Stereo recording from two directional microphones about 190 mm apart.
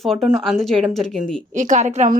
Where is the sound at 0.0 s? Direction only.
Centre (ahead or behind).